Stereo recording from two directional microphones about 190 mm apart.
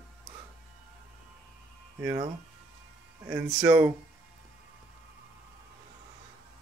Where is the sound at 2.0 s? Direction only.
15° right (ahead or behind).